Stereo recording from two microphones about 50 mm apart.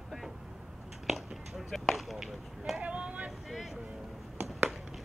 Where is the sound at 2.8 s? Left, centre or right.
Right.